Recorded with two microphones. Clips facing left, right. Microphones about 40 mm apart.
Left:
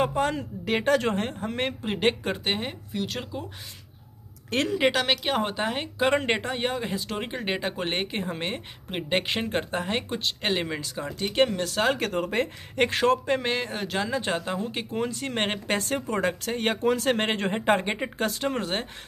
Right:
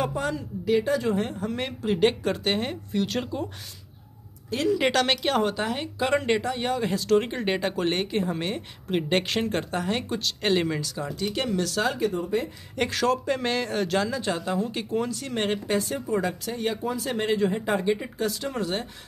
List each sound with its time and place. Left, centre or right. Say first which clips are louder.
0.0 s a woman's voice: left 3 dB; left; by 3.4 s centre
4.7 s speech: left 1 dB; centre
5.4 s speech: right 1 dB; left
6.8 s speech: right 8 dB; centre
7.7 s speech: right 3 dB; left
8.9 s speech: right 2 dB; centre
10.5 s speech: right 6 dB; centre
10.8 s speech: right 1 dB; left
12.0 s speech: right 2 dB; left
12.7 s speech: left 2 dB; left
13.4 s speech: right 2 dB; left
14.1 s speech: right 1 dB; left